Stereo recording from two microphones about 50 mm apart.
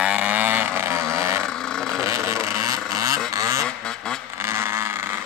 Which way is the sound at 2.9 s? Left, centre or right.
Right.